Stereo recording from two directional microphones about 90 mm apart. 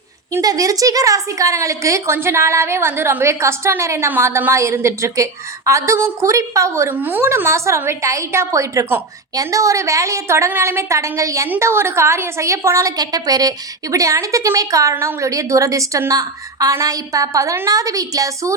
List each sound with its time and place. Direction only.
0.4 s a woman's voice: 40° right (ahead or behind)
6.9 s a woman's voice: 20° right (ahead or behind)
13.0 s a woman's voice: 45° right (ahead or behind)